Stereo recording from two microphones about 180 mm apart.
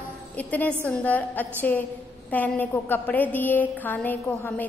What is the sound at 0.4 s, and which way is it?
A woman's voice, 10° left (ahead or behind).